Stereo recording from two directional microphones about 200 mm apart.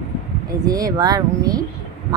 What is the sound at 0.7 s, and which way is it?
Speech, 20° right (ahead or behind).